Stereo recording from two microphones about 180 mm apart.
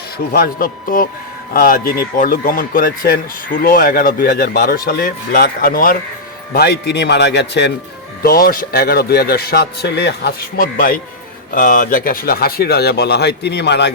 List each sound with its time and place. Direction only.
0.3 s a man's voice: 55° left (ahead or behind); by 7.7 s 70° left (ahead or behind)
8.2 s a man's voice: 55° left (ahead or behind); by 13.9 s 70° left (ahead or behind)